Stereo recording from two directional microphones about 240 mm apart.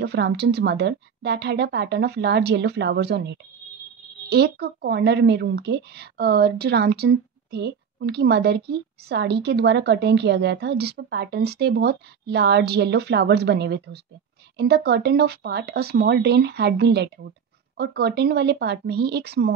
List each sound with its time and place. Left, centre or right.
0.0 s a woman's voice: right